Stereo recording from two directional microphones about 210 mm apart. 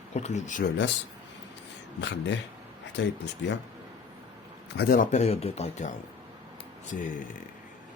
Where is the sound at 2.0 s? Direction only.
55° left (ahead or behind).